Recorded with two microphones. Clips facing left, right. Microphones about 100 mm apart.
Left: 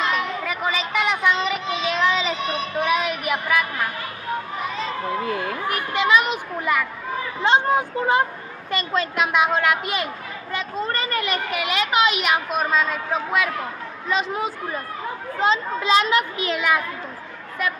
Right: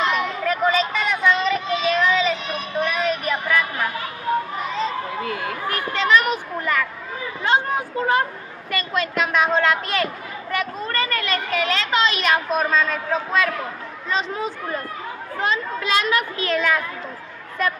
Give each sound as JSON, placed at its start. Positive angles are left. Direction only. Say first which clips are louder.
{"t": 0.1, "sound": "child singing", "louder": "right 2 dB", "side_deg": 5}
{"t": 2.8, "sound": "a sound", "louder": "even", "side_deg": 15}
{"t": 5.2, "sound": "children playing", "louder": "left 1 dB", "side_deg": 25}
{"t": 5.9, "sound": "children playing", "louder": "right 1 dB", "side_deg": 15}
{"t": 7.4, "sound": "a woman's voice", "louder": "left 2 dB", "side_deg": 20}
{"t": 15.4, "sound": "a child's voice", "louder": "left 3 dB", "side_deg": 20}